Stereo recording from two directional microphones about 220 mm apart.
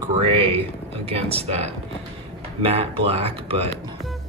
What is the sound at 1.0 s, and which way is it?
Speech, 25° right (ahead or behind).